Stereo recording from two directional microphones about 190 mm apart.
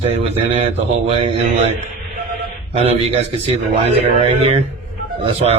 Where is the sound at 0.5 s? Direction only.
30° right (ahead or behind).